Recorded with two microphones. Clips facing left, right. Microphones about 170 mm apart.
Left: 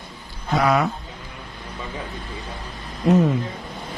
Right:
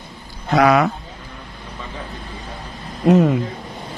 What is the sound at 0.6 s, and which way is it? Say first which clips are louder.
Speech: right 5 dB; 75° right (ahead or behind).